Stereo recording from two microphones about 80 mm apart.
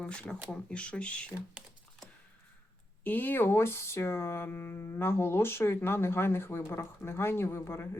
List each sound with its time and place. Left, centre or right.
0.0 s speech: centre
3.0 s speech: left